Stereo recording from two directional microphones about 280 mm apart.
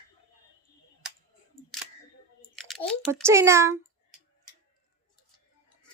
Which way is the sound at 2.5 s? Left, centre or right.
Centre.